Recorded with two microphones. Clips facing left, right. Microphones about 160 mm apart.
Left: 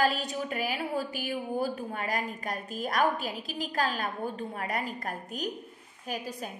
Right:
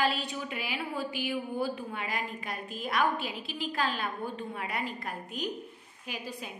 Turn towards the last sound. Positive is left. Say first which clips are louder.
# left 4 dB
turn(degrees=45)  # may be behind; listen again after turning